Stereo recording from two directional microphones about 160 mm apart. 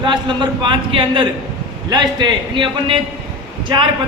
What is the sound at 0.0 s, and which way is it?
A man's voice, 30° right (ahead or behind).